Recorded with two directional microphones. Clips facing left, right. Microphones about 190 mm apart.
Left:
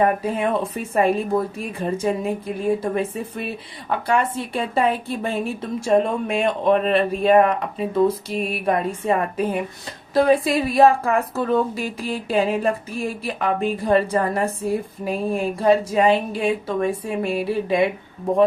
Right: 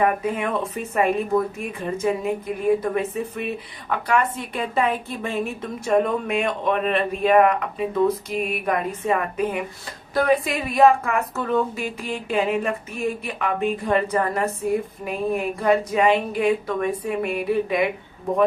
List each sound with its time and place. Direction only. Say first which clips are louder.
0.0 s speech: left 2 dB; 30° left (ahead or behind)